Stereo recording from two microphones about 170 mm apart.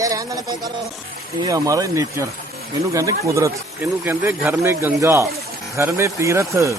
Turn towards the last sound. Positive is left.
turn(degrees=-15)  # may be behind; listen again after turning